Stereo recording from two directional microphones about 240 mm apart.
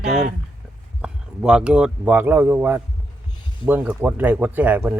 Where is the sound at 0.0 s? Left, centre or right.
Centre.